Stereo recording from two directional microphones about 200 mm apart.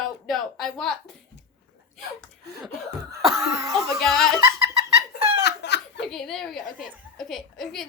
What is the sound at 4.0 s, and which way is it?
Speech, centre (ahead or behind).